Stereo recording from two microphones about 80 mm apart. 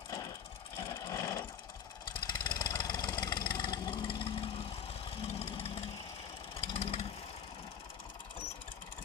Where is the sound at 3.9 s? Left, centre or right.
Left.